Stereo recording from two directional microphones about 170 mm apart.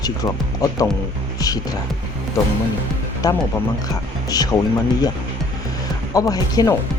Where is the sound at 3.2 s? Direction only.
20° left (ahead or behind).